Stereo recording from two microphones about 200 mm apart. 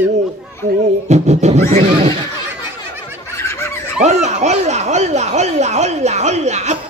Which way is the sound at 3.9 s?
35° right (ahead or behind).